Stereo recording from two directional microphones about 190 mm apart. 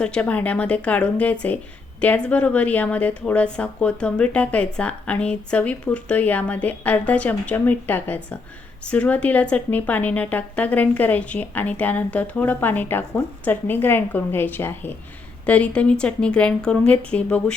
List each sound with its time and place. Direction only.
0.0 s a woman's voice: 5° left (ahead or behind)